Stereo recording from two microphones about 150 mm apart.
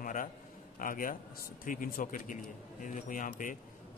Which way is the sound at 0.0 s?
65° left (ahead or behind).